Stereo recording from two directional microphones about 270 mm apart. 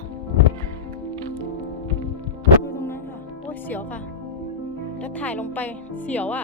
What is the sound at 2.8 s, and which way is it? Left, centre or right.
Music, centre.